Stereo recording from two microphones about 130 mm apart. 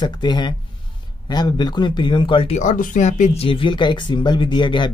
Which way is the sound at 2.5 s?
80° left.